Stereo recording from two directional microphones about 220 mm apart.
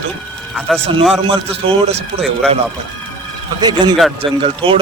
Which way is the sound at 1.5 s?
25° right (ahead or behind).